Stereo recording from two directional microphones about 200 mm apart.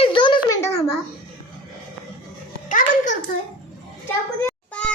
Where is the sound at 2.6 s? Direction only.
40° left (ahead or behind).